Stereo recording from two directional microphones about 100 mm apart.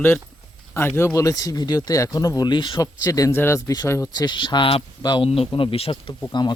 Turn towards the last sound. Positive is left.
turn(degrees=45)  # may be behind; listen again after turning